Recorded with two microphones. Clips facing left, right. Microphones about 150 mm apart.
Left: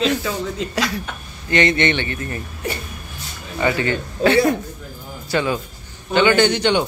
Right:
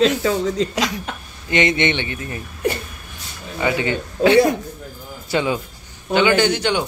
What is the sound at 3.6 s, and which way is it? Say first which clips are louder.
Speech: left 1 dB; 10° right (ahead or behind).